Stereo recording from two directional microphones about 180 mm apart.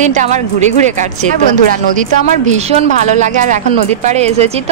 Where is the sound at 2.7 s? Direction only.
40° right (ahead or behind).